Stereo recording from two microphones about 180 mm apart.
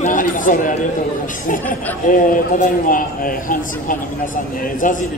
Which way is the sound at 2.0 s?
50° left (ahead or behind).